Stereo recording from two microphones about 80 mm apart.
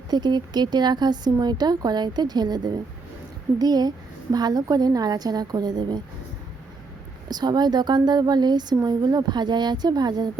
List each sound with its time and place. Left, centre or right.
0.1 s speech: right
7.3 s speech: right